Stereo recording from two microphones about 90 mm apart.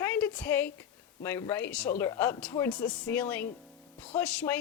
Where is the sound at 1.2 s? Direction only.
25° left (ahead or behind).